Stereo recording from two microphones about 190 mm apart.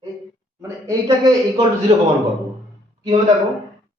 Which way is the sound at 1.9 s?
35° right (ahead or behind).